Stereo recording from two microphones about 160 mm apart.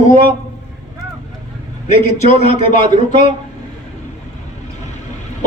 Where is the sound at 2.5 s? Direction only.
35° right (ahead or behind).